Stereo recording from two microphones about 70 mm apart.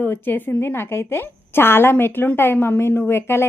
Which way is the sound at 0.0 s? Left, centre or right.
Left.